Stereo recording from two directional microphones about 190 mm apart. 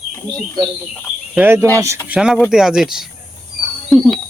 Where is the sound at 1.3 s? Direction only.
10° right (ahead or behind).